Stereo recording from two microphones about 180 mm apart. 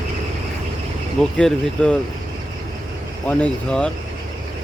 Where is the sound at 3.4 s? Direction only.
5° left (ahead or behind).